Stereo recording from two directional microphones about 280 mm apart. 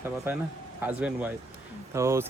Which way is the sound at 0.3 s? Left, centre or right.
Centre.